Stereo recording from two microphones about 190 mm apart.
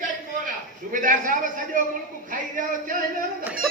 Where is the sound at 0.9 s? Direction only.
45° right (ahead or behind).